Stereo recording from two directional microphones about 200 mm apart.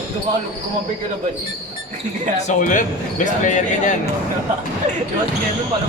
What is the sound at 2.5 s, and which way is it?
Speech, 40° left (ahead or behind).